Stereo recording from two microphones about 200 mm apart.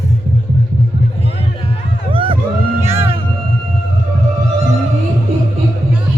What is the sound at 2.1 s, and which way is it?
Music, 25° right (ahead or behind).